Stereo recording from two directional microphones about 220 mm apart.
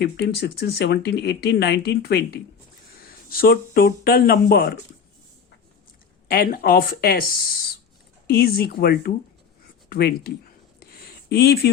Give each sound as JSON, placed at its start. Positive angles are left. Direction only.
{"t": 0.0, "sound": "speech", "side_deg": 45}
{"t": 6.2, "sound": "speech", "side_deg": 45}
{"t": 8.3, "sound": "speech", "side_deg": 45}
{"t": 10.8, "sound": "a sound", "side_deg": 45}